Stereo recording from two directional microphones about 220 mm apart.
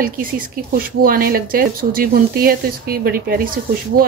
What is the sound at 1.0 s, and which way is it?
Speech, 40° right (ahead or behind).